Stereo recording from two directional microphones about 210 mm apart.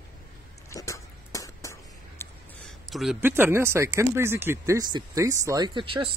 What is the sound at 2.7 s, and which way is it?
Speech, centre (ahead or behind).